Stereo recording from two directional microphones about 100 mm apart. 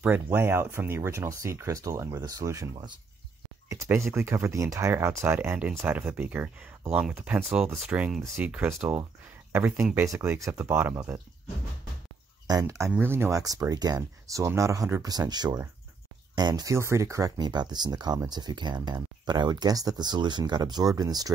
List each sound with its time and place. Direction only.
0.0 s speech: 20° right (ahead or behind)
12.4 s speech: 35° right (ahead or behind)
13.4 s speech: 40° right (ahead or behind)
16.7 s speech: 30° right (ahead or behind)
17.4 s speech: 45° right (ahead or behind)